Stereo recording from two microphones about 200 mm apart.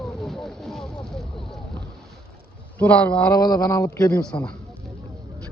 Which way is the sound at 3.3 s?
20° left (ahead or behind).